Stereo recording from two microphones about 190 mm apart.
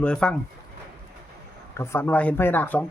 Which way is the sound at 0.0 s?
5° left (ahead or behind).